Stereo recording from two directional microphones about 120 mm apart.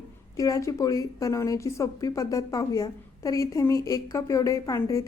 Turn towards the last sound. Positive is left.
turn(degrees=25)  # may be behind; listen again after turning